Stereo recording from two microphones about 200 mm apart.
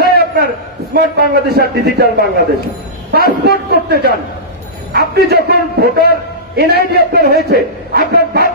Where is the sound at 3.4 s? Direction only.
50° right (ahead or behind).